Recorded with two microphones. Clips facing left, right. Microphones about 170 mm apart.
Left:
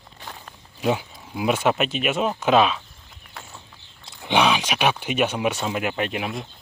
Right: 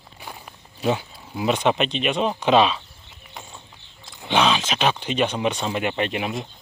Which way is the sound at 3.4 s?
15° right (ahead or behind).